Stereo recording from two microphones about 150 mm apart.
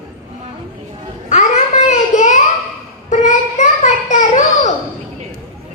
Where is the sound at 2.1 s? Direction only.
50° left (ahead or behind).